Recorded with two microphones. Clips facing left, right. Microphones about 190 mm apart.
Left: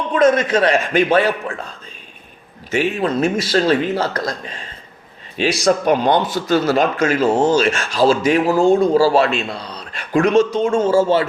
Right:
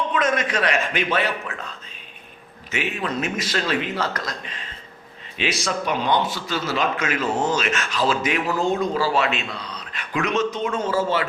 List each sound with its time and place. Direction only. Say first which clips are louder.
0.1 s a man's voice: left 8 dB; 30° left (ahead or behind)
0.9 s speech: left 8 dB; 40° left (ahead or behind)
2.6 s a man's voice: left 8 dB; 35° left (ahead or behind)